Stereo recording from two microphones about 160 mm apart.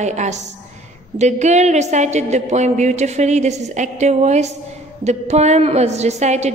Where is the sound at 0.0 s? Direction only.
45° right (ahead or behind).